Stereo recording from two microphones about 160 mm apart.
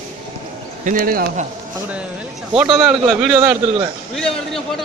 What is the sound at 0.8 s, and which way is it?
Speech, 55° right (ahead or behind).